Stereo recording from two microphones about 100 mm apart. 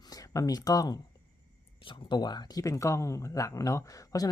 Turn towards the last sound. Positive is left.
turn(degrees=35)  # may be behind; listen again after turning